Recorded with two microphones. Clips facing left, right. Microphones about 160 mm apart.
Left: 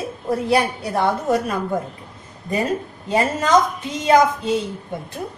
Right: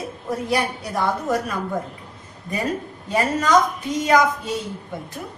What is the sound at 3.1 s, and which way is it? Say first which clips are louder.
A woman's voice: left 1 dB; 25° left (ahead or behind).